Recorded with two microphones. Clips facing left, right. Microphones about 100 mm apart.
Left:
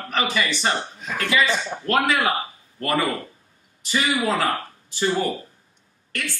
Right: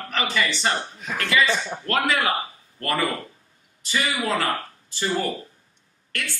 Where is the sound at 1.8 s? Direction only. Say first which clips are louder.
Left 3 dB; 10° left (ahead or behind).